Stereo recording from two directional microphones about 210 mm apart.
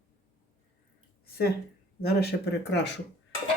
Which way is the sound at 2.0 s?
50° left (ahead or behind).